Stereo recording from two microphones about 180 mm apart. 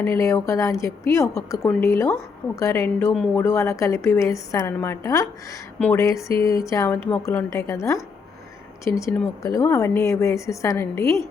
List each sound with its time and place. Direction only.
0.0 s a woman's voice: 15° left (ahead or behind)